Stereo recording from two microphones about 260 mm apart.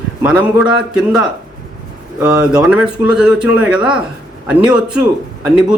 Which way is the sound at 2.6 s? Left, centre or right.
Centre.